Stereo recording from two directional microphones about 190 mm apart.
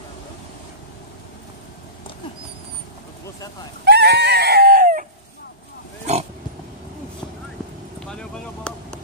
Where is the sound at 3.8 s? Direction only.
60° right (ahead or behind).